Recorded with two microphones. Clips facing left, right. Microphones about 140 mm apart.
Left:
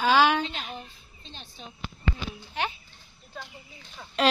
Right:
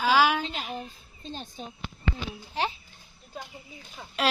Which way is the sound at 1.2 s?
45° right (ahead or behind).